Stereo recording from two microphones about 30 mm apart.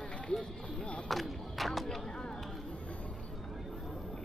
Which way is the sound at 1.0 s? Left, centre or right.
Centre.